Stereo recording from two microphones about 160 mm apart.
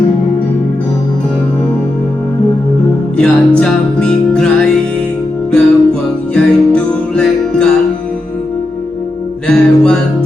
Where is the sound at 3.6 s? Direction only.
5° left (ahead or behind).